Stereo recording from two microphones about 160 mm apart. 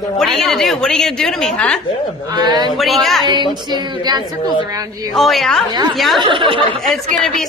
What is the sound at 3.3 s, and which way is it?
Speech, 25° right (ahead or behind).